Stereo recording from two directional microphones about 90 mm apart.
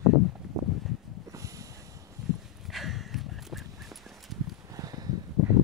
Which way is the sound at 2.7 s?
Centre (ahead or behind).